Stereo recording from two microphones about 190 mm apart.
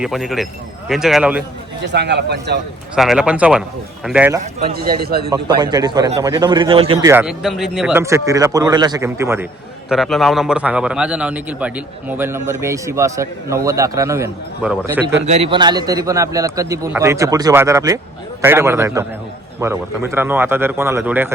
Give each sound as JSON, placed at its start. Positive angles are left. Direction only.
{"t": 0.0, "sound": "a man's voice", "side_deg": 0}
{"t": 1.8, "sound": "speech", "side_deg": -65}
{"t": 2.9, "sound": "a man's voice", "side_deg": -5}
{"t": 4.7, "sound": "speech", "side_deg": -55}
{"t": 5.3, "sound": "a man's voice", "side_deg": -20}
{"t": 7.0, "sound": "a man's voice", "side_deg": -10}
{"t": 8.0, "sound": "a man's voice", "side_deg": -15}
{"t": 9.9, "sound": "a man's voice", "side_deg": 0}
{"t": 15.3, "sound": "a man's voice", "side_deg": -30}